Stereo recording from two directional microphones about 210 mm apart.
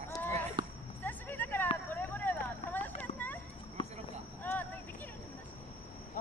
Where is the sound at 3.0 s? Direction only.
10° left (ahead or behind).